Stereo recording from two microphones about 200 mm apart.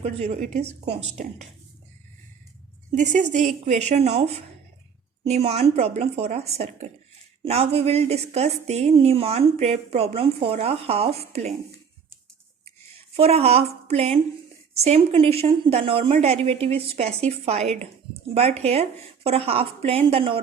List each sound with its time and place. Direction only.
0.0 s a woman's voice: 35° right (ahead or behind)
2.9 s a woman's voice: 35° right (ahead or behind)
13.1 s a woman's voice: 30° right (ahead or behind)